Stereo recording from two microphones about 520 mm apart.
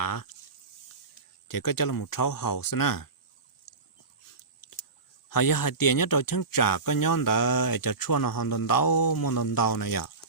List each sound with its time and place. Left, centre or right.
0.0 s a sound: left
1.5 s speech: left
5.3 s speech: left